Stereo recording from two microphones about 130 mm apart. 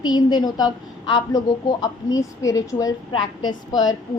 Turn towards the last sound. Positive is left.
turn(degrees=30)  # may be behind; listen again after turning